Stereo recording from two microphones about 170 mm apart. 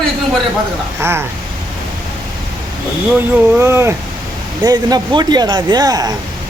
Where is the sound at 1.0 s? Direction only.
15° right (ahead or behind).